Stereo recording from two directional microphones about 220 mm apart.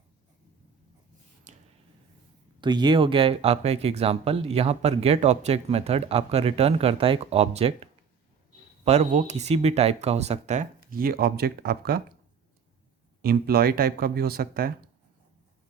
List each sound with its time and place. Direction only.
1.5 s a sound: 35° right (ahead or behind)
2.6 s speech: 20° right (ahead or behind); by 12.0 s 45° right (ahead or behind)
13.2 s speech: 45° right (ahead or behind)